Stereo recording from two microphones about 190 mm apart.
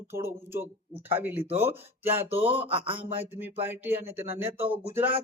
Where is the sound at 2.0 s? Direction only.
10° right (ahead or behind).